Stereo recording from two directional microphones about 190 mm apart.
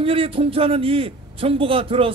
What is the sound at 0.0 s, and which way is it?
A man's voice, 30° right (ahead or behind).